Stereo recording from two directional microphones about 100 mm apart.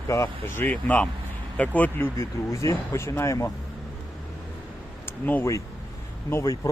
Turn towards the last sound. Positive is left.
turn(degrees=30)  # may be behind; listen again after turning